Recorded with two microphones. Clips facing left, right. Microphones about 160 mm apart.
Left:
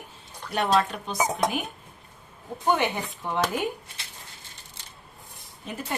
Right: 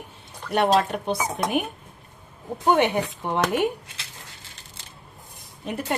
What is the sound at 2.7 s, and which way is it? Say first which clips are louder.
A woman's voice: right 7 dB; 60° right (ahead or behind).